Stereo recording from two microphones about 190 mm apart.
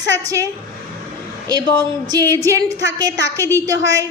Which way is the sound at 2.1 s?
20° right (ahead or behind).